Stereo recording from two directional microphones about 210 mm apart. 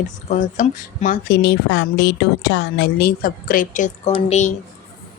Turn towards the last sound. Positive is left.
turn(degrees=30)  # may be behind; listen again after turning